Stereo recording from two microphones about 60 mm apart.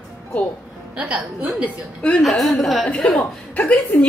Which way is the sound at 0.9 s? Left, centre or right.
Right.